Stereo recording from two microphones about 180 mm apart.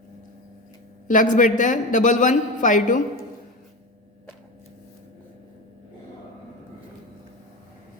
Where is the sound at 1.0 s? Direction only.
45° left (ahead or behind).